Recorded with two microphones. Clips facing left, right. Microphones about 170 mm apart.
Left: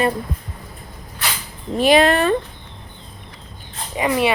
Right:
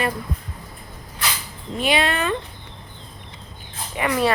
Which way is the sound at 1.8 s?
40° left (ahead or behind).